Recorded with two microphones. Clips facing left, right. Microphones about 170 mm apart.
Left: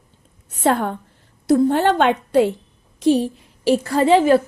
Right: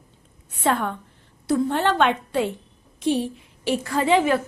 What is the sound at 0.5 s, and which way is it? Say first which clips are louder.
A woman's voice: left 4 dB; 40° left (ahead or behind).